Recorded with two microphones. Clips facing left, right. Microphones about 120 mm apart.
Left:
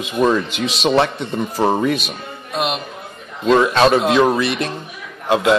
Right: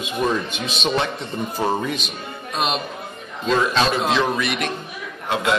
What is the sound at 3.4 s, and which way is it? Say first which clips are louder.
Speech: left 6 dB; 60° left (ahead or behind).